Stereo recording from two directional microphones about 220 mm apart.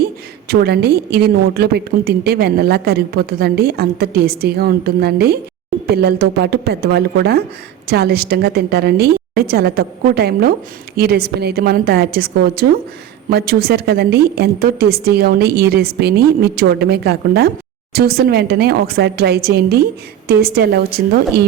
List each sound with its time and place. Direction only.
0.0 s a woman's voice: 45° right (ahead or behind)